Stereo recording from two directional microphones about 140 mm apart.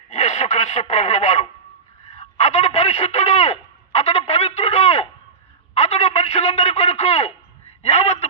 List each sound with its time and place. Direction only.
0.1 s a man's voice: 55° left (ahead or behind)
3.9 s a sound: 50° left (ahead or behind)
7.8 s a man's voice: 50° left (ahead or behind)